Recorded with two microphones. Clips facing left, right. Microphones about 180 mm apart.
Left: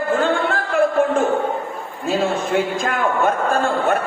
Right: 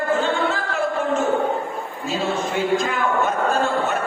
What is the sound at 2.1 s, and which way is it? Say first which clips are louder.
A man's voice: left 4 dB; 55° left (ahead or behind).